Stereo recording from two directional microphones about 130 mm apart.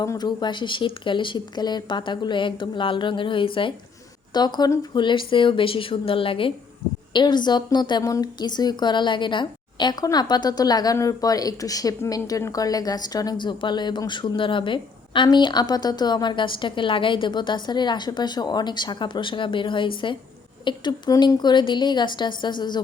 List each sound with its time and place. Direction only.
0.0 s a woman's voice: 30° left (ahead or behind)